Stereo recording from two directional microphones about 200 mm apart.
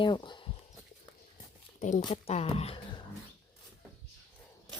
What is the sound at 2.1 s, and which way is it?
Speech, 30° left (ahead or behind).